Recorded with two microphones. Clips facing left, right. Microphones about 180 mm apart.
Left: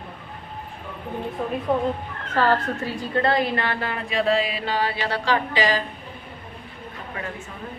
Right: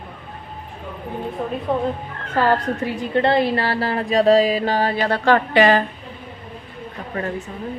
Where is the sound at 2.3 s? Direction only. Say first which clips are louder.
Right 2 dB; 15° right (ahead or behind); by 5.8 s 60° right (ahead or behind).